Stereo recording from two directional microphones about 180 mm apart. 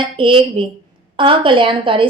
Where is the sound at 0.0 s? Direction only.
30° right (ahead or behind).